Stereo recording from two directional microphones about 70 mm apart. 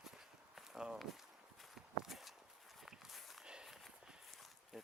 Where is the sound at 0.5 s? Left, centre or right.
Centre.